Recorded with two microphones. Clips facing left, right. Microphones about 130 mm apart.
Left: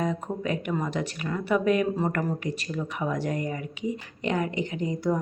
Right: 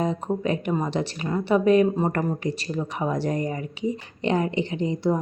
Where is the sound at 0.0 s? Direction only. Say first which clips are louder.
Right 4 dB; 30° right (ahead or behind).